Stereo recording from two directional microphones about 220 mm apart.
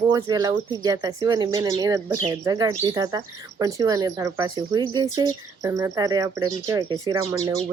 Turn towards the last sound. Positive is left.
turn(degrees=-15)  # may be behind; listen again after turning